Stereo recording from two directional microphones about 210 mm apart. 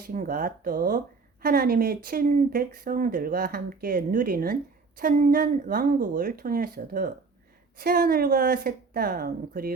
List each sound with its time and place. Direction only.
0.1 s a woman's voice: 40° right (ahead or behind)